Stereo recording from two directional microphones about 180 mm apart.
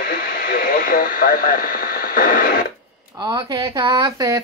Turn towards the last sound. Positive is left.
turn(degrees=-20)  # may be behind; listen again after turning